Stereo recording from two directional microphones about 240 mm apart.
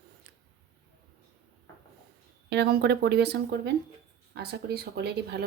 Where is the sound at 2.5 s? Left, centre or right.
Right.